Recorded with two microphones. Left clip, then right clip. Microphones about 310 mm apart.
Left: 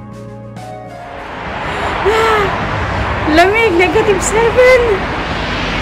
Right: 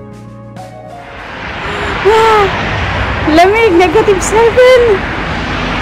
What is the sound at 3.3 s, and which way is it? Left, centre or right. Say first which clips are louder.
Speech: right 3 dB; centre.